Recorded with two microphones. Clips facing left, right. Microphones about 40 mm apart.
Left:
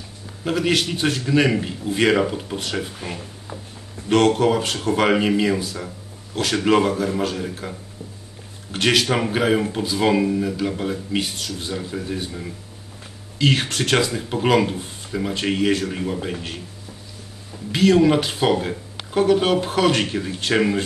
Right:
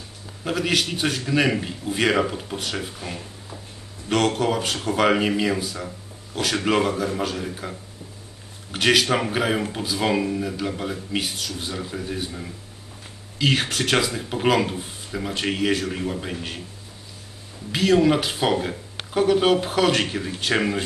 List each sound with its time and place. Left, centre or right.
0.4 s speech: centre
4.1 s speech: centre
8.7 s speech: centre
17.6 s speech: centre